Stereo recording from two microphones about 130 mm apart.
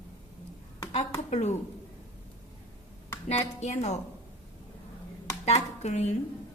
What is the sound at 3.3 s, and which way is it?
Speech, 60° left (ahead or behind).